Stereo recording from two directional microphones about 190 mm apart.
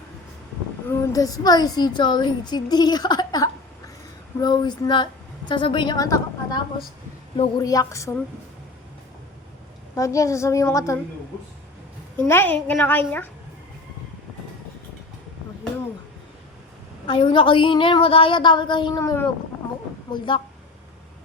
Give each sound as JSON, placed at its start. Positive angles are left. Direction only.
{"t": 0.9, "sound": "a woman's voice", "side_deg": 20}
{"t": 7.6, "sound": "a child's voice", "side_deg": 20}
{"t": 9.9, "sound": "a child's voice", "side_deg": 15}
{"t": 12.1, "sound": "a child's voice", "side_deg": 10}
{"t": 17.1, "sound": "a woman's voice", "side_deg": 25}
{"t": 20.1, "sound": "a woman's voice", "side_deg": 25}